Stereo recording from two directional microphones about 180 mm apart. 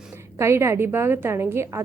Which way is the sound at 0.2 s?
15° right (ahead or behind).